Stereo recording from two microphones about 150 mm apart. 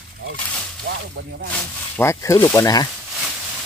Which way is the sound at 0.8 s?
90° right.